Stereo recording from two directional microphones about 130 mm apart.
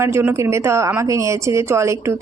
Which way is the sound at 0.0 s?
20° right (ahead or behind).